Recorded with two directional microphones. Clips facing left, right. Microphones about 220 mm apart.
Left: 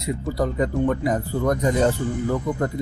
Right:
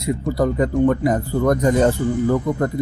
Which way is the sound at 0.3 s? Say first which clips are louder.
Right 4 dB; 50° right (ahead or behind).